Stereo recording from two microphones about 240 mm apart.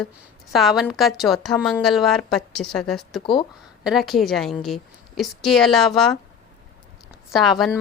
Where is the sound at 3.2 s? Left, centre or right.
Centre.